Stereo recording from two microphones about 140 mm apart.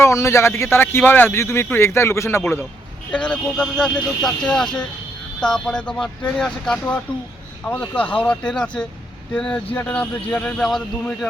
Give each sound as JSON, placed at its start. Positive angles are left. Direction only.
{"t": 0.0, "sound": "speech", "side_deg": 20}
{"t": 3.1, "sound": "speech", "side_deg": 5}